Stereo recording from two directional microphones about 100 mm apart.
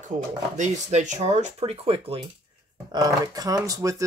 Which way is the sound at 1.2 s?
85° right.